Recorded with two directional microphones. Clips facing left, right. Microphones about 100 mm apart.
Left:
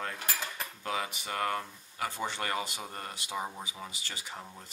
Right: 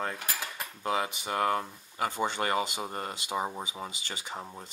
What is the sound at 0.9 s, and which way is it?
Speech, 20° right (ahead or behind).